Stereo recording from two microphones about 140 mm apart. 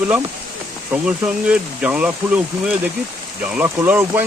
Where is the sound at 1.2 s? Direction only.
10° right (ahead or behind).